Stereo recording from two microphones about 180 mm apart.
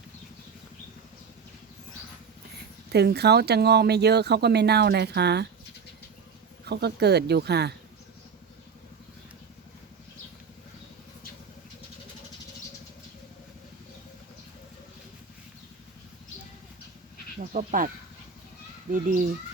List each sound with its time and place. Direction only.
2.9 s speech: 65° right (ahead or behind)
6.7 s speech: 65° right (ahead or behind)
17.5 s speech: 45° right (ahead or behind)